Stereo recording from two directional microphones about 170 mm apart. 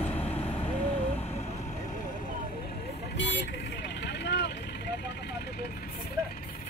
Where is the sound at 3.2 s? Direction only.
90° left; by 5.9 s 65° left (ahead or behind).